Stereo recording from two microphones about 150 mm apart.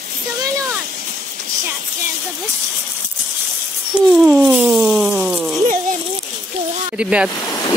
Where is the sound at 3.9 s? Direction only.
5° right (ahead or behind).